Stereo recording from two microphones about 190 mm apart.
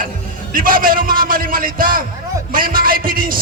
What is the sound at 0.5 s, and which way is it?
A man's voice, 45° right (ahead or behind).